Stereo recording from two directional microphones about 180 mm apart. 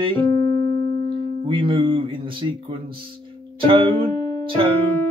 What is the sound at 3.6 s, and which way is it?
Music, 30° right (ahead or behind).